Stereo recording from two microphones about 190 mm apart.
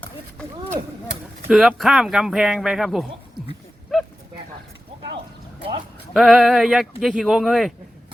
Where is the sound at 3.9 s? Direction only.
Centre (ahead or behind).